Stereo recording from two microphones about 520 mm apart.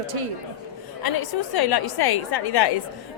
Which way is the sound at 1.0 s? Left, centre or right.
Left.